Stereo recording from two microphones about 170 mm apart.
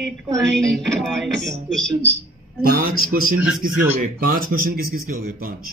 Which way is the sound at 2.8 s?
60° right (ahead or behind).